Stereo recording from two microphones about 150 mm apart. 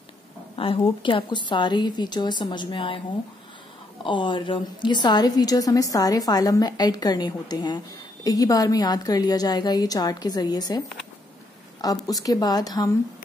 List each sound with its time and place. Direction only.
0.6 s a woman's voice: 35° left (ahead or behind)
4.0 s a woman's voice: 30° left (ahead or behind)
11.8 s a woman's voice: 25° left (ahead or behind)